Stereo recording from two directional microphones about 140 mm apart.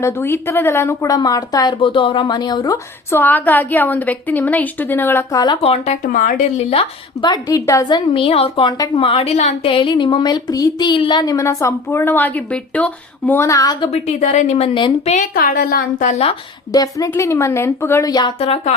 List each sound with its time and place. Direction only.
0.0 s speech: 15° left (ahead or behind)
3.1 s a woman's voice: 15° left (ahead or behind)
5.6 s a woman's voice: 45° left (ahead or behind)
6.1 s speech: 70° left (ahead or behind)
7.2 s a woman's voice: 30° left (ahead or behind)
13.9 s a woman's voice: 55° left (ahead or behind); by 15.1 s 40° left (ahead or behind)
15.1 s a woman's voice: 70° left (ahead or behind); by 16.3 s 55° left (ahead or behind)
16.7 s speech: 25° left (ahead or behind)
18.1 s a woman's voice: 30° left (ahead or behind)
18.3 s a woman's voice: 45° left (ahead or behind)